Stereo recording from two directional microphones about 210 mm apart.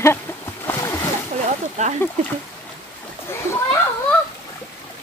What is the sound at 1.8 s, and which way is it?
Speech, 35° right (ahead or behind).